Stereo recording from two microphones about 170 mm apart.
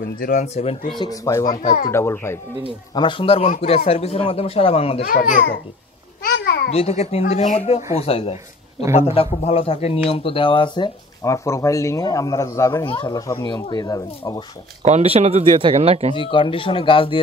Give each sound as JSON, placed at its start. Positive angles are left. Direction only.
{"t": 0.2, "sound": "speech", "side_deg": 45}
{"t": 0.9, "sound": "speech", "side_deg": 20}
{"t": 2.9, "sound": "speech", "side_deg": 30}
{"t": 5.0, "sound": "a child's voice", "side_deg": 55}
{"t": 6.3, "sound": "babbling", "side_deg": 70}
{"t": 6.7, "sound": "speech", "side_deg": 40}
{"t": 11.2, "sound": "speech", "side_deg": 15}
{"t": 12.8, "sound": "speech", "side_deg": 30}
{"t": 14.8, "sound": "speech", "side_deg": -40}
{"t": 16.2, "sound": "speech", "side_deg": 30}